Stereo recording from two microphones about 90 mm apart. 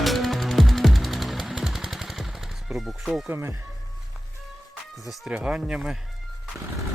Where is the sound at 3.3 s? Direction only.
30° right (ahead or behind).